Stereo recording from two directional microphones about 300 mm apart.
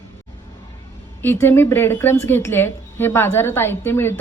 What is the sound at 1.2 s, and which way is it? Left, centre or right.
A woman's voice, centre.